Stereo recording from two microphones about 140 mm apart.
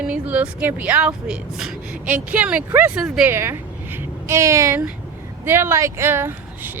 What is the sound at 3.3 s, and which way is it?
A woman's voice, 15° right (ahead or behind).